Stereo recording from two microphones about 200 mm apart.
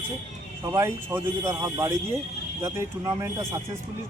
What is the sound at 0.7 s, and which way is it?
Speech, 15° right (ahead or behind).